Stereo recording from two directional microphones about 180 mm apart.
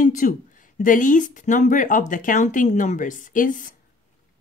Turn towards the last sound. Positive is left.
turn(degrees=45)  # may be behind; listen again after turning